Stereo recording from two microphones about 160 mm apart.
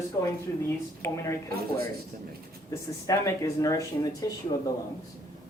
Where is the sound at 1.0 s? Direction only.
20° left (ahead or behind).